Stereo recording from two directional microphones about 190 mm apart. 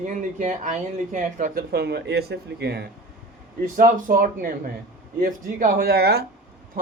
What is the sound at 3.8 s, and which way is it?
Speech, 45° right (ahead or behind).